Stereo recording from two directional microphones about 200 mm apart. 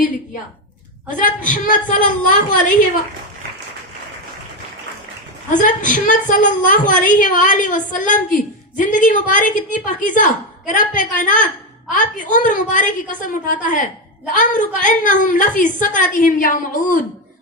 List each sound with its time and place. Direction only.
1.2 s a woman's voice: 40° left (ahead or behind)
5.5 s a woman's voice: 40° left (ahead or behind)